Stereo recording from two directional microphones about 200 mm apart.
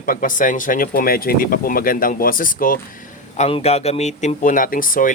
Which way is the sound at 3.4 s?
30° left (ahead or behind).